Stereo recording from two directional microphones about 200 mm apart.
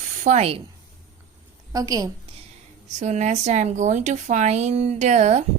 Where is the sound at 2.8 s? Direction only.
35° right (ahead or behind).